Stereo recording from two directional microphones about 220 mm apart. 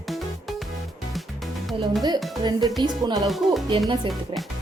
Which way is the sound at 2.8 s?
20° right (ahead or behind).